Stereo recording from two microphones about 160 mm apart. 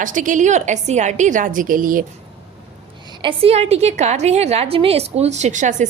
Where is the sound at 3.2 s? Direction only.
40° right (ahead or behind).